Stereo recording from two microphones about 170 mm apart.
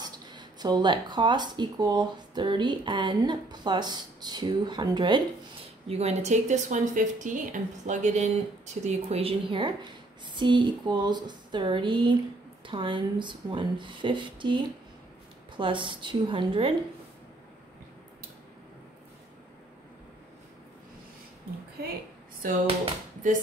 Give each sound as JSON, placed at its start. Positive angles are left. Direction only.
{"t": 0.0, "sound": "speech", "side_deg": -25}
{"t": 5.9, "sound": "a woman's voice", "side_deg": -40}
{"t": 23.2, "sound": "a woman's voice", "side_deg": -50}